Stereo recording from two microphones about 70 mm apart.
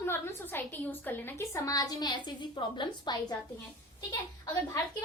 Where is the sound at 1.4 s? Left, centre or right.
Left.